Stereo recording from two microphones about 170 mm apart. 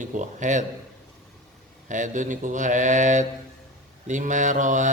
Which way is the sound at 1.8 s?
45° right (ahead or behind).